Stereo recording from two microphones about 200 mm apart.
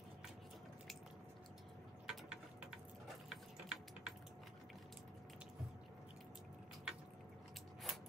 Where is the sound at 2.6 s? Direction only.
Centre (ahead or behind).